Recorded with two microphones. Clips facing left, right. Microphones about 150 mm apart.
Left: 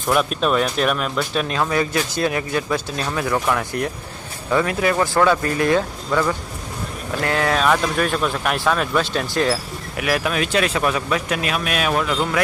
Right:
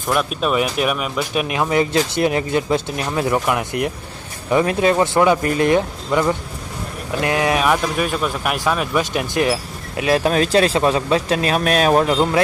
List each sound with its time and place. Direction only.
0.1 s speech: centre (ahead or behind); by 9.6 s 15° right (ahead or behind)
10.0 s speech: 30° right (ahead or behind)